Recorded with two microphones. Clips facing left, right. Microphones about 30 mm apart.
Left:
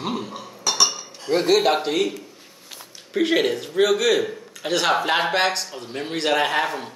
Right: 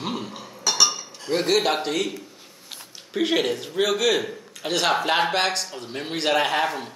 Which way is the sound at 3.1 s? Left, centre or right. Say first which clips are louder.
Left 2 dB; centre.